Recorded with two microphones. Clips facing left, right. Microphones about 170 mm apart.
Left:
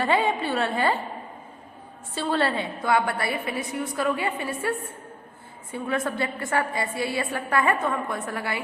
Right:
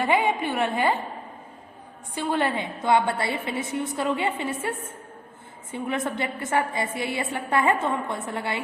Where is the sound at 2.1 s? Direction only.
15° right (ahead or behind).